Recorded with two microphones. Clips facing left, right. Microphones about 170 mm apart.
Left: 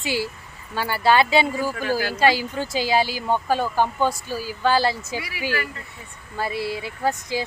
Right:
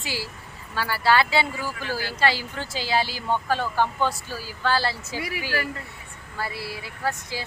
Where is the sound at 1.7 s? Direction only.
45° left (ahead or behind).